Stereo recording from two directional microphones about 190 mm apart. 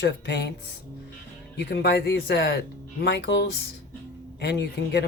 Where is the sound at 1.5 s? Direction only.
60° left (ahead or behind).